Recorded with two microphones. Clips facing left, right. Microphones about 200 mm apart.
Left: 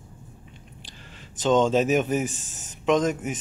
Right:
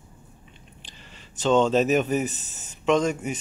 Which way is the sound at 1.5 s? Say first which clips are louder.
Even; 10° left (ahead or behind).